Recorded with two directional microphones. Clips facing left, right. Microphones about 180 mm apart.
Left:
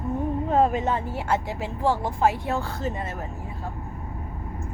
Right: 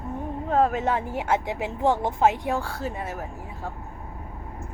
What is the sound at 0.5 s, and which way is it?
Speech, centre (ahead or behind).